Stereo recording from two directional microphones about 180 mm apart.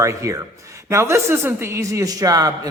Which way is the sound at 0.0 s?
15° right (ahead or behind).